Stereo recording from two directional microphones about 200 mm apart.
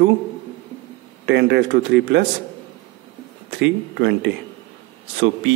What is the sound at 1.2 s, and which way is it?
Speech, 60° right (ahead or behind).